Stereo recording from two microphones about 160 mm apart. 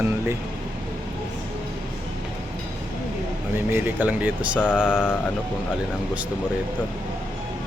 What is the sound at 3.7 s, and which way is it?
Speech, 10° right (ahead or behind).